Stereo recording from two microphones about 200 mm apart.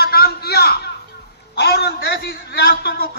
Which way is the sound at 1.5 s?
55° left (ahead or behind).